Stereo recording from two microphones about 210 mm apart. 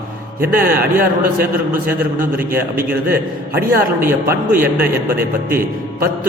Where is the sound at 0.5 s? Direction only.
45° right (ahead or behind).